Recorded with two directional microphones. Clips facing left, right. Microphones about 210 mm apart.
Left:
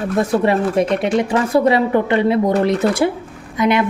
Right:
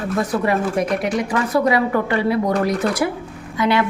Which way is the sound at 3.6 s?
20° left (ahead or behind).